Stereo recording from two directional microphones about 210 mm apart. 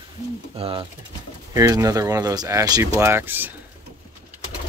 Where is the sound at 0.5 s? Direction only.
25° right (ahead or behind).